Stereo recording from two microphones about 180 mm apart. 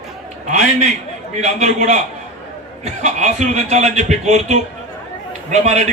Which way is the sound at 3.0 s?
40° right (ahead or behind).